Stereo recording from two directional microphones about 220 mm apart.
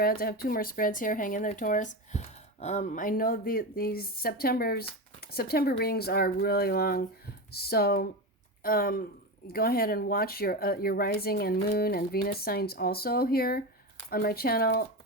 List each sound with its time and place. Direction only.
0.0 s speech: 40° left (ahead or behind)